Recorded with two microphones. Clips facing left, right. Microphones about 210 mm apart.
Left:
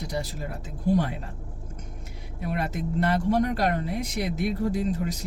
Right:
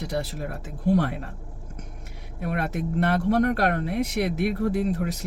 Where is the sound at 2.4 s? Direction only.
65° right (ahead or behind).